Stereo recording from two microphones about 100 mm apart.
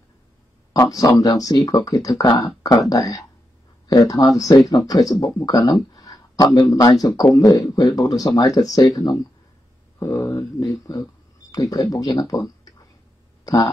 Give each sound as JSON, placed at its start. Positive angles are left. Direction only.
{"t": 0.7, "sound": "speech", "side_deg": 35}
{"t": 10.1, "sound": "speech", "side_deg": 25}
{"t": 10.6, "sound": "speech", "side_deg": 40}